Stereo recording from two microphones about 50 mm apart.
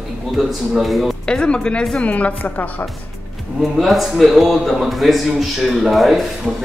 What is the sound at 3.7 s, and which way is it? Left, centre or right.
A man's voice, centre.